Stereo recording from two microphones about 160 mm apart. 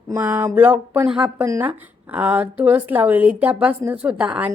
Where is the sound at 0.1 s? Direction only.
15° right (ahead or behind).